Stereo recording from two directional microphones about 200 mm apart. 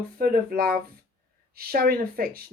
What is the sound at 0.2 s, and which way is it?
Speech, 50° right (ahead or behind).